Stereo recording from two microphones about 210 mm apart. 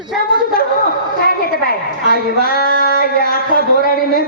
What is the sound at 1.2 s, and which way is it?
A woman's voice, 45° left (ahead or behind).